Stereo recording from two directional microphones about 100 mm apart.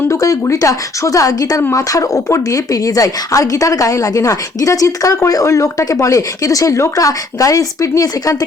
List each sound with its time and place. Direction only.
0.1 s speech: 30° left (ahead or behind)